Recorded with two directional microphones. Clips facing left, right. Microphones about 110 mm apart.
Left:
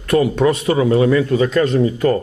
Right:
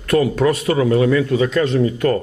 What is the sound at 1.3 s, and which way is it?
Speech, 40° left (ahead or behind).